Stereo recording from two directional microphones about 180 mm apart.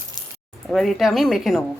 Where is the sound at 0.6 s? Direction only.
Centre (ahead or behind).